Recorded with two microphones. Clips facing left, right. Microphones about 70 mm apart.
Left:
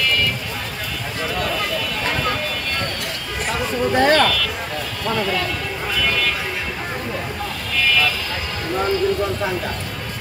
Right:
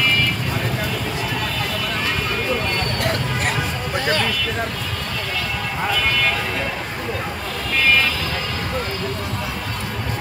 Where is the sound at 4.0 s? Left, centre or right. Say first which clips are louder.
Left 7 dB; left.